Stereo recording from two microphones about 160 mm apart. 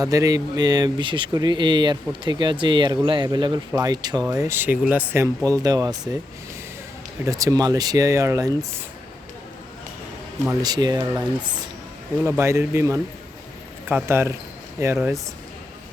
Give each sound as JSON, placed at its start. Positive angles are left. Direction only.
{"t": 0.0, "sound": "speech", "side_deg": -20}
{"t": 7.3, "sound": "speech", "side_deg": -20}
{"t": 10.5, "sound": "speech", "side_deg": -25}
{"t": 14.9, "sound": "speech", "side_deg": 0}